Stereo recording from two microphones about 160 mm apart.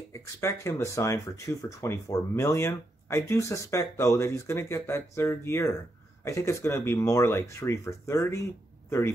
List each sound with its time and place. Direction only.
0.1 s speech: 15° left (ahead or behind)